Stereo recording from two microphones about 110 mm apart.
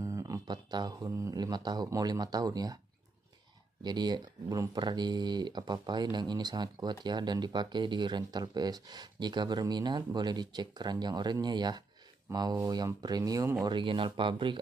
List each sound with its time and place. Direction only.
0.0 s speech: 30° right (ahead or behind)
3.8 s speech: 40° right (ahead or behind)
13.7 s speech: 50° right (ahead or behind)